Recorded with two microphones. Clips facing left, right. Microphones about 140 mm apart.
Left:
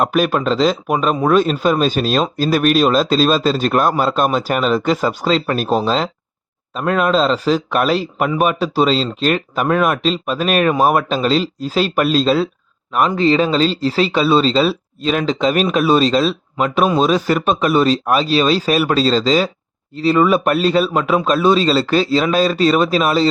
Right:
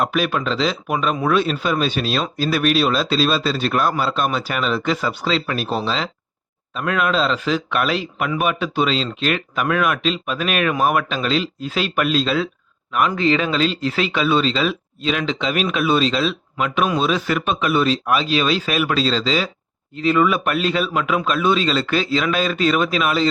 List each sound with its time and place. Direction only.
0.0 s speech: 45° left (ahead or behind)